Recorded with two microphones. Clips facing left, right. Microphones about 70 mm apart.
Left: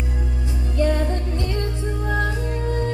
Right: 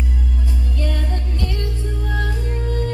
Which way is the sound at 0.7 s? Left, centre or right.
Left.